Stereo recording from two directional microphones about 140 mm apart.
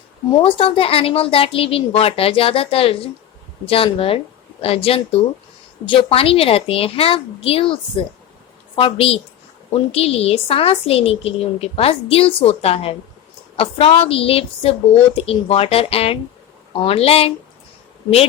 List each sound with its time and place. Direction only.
0.4 s a woman's voice: 40° left (ahead or behind)